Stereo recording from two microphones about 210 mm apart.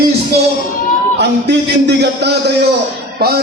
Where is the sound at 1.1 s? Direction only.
55° right (ahead or behind).